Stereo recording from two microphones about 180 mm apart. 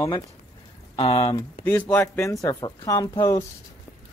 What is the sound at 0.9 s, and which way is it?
Speech, 30° left (ahead or behind).